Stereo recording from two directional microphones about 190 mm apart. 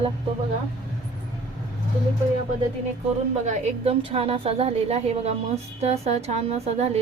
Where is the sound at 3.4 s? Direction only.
35° right (ahead or behind).